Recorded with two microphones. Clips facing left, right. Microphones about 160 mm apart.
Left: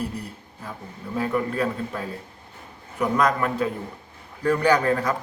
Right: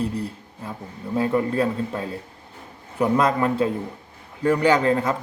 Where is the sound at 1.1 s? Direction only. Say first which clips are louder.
Right 4 dB; 30° right (ahead or behind).